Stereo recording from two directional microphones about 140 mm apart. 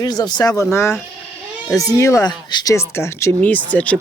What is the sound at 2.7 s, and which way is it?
Speech, 20° left (ahead or behind).